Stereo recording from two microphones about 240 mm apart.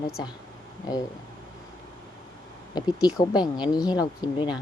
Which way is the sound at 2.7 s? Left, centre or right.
Centre.